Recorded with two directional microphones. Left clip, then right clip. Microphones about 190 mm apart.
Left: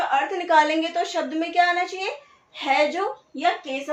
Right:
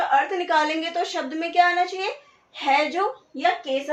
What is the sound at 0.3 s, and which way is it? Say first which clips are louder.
A woman's voice: left 3 dB; 20° right (ahead or behind).